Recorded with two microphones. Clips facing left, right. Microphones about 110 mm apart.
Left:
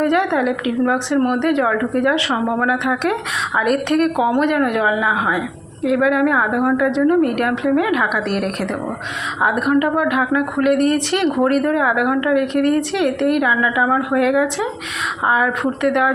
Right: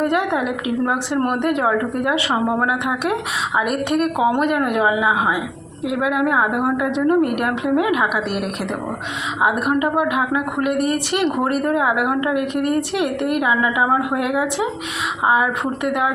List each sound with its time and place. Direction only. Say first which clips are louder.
0.0 s a woman's voice: left 3 dB; 10° right (ahead or behind)
9.4 s a woman's voice: left 2 dB; 15° right (ahead or behind)